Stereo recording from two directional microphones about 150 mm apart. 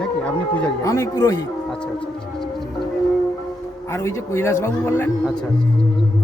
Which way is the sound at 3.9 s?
20° left (ahead or behind).